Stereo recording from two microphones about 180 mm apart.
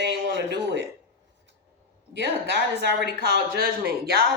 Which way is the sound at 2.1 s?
70° right (ahead or behind).